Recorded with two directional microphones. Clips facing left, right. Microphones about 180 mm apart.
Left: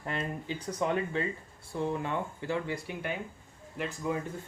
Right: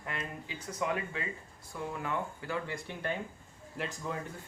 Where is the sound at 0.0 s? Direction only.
35° left (ahead or behind).